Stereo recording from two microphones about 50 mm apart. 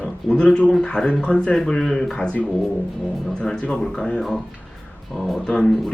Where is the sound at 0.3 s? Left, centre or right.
Centre.